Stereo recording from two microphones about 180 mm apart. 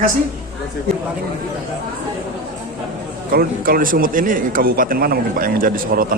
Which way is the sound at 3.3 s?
55° right (ahead or behind).